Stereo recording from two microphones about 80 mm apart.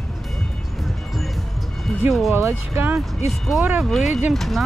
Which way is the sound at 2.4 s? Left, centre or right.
Right.